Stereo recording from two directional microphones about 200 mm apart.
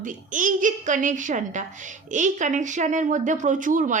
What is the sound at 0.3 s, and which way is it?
A child's voice, 40° right (ahead or behind).